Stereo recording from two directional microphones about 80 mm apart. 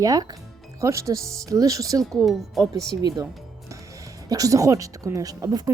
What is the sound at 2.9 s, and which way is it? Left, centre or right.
Speech, right.